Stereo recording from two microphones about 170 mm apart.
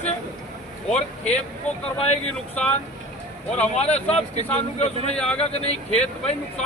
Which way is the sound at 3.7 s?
40° left (ahead or behind).